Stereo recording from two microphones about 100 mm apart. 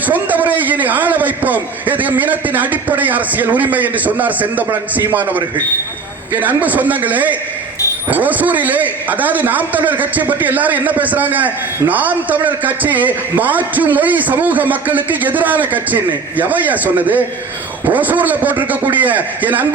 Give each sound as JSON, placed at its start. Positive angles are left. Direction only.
{"t": 0.0, "sound": "a man's voice", "side_deg": -15}